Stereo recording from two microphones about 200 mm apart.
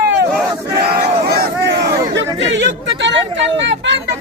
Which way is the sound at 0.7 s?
50° right (ahead or behind).